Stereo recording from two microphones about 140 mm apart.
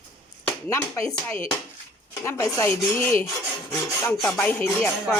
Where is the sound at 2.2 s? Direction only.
20° left (ahead or behind).